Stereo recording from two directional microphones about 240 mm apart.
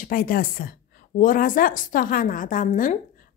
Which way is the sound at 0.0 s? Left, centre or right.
Left.